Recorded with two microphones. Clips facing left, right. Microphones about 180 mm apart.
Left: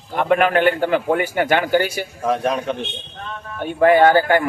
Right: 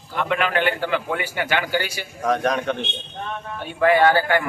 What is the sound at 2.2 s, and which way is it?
Speech, 5° left (ahead or behind).